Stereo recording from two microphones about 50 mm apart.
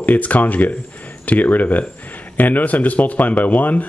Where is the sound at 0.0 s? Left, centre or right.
Left.